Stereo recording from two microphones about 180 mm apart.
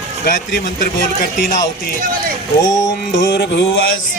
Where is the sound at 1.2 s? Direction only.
45° left (ahead or behind).